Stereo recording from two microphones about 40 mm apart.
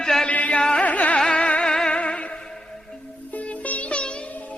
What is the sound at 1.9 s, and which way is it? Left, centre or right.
Music, left.